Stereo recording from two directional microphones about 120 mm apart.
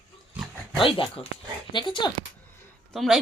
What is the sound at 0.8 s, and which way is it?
Speech, 45° left (ahead or behind).